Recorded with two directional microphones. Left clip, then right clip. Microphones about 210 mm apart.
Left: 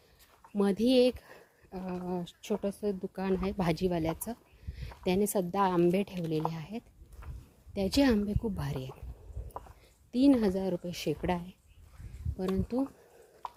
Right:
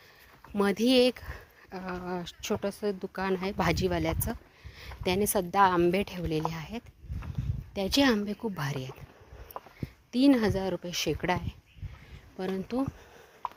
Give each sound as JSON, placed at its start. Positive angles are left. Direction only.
{"t": 0.5, "sound": "speech", "side_deg": -5}
{"t": 9.5, "sound": "a sound", "side_deg": -25}
{"t": 10.1, "sound": "speech", "side_deg": 0}